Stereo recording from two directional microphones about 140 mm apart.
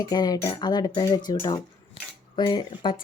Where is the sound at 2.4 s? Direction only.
35° left (ahead or behind).